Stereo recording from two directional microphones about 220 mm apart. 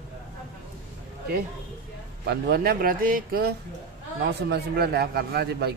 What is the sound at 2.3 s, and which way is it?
A man's voice, 45° right (ahead or behind).